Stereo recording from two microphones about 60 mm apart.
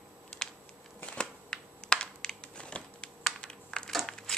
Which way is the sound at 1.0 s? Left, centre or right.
Centre.